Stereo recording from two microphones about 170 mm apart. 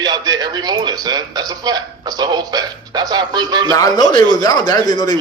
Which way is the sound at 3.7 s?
20° left (ahead or behind).